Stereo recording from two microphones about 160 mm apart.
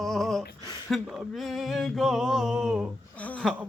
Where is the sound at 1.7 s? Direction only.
Centre (ahead or behind).